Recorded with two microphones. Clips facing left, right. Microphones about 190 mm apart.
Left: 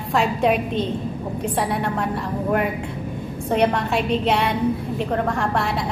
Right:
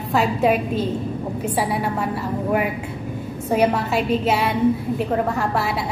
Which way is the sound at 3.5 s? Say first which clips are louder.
Right 1 dB; 5° right (ahead or behind).